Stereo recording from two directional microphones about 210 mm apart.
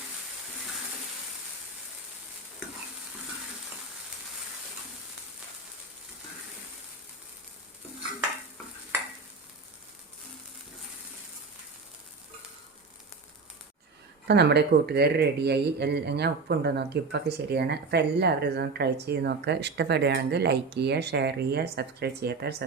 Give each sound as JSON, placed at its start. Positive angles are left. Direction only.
{"t": 14.3, "sound": "speech", "side_deg": -50}